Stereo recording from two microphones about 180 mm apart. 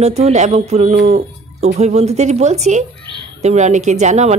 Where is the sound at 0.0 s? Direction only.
35° right (ahead or behind).